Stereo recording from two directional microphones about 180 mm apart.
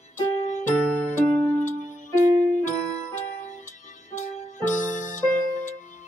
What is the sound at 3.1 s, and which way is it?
Music, 45° left (ahead or behind).